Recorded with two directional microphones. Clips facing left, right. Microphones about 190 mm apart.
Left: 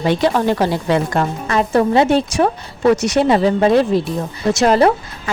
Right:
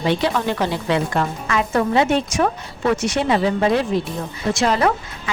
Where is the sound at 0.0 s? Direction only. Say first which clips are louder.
Left 4 dB; 45° left (ahead or behind).